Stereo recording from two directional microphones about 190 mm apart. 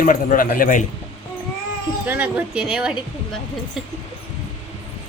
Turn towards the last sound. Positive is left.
turn(degrees=-5)  # may be behind; listen again after turning